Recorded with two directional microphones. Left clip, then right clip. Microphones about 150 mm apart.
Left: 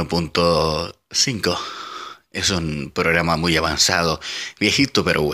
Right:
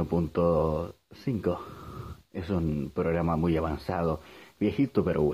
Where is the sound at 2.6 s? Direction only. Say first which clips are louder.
Left 9 dB; 10° left (ahead or behind).